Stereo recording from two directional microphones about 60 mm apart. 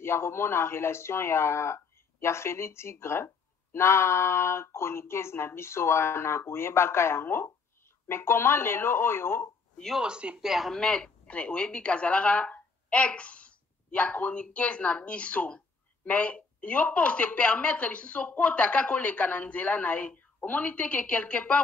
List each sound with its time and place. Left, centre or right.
0.0 s speech: left
9.9 s speech: centre
10.4 s speech: centre
10.7 s speech: centre